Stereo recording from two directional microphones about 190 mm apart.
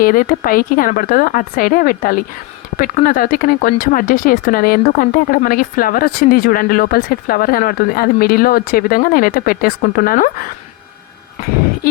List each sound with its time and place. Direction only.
0.0 s speech: 50° left (ahead or behind)